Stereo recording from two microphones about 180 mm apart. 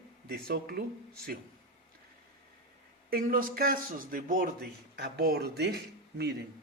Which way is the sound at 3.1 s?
55° right (ahead or behind).